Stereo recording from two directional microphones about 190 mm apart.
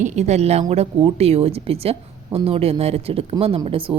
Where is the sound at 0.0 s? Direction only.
35° right (ahead or behind).